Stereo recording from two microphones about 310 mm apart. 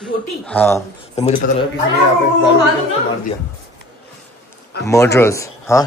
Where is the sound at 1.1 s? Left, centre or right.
Left.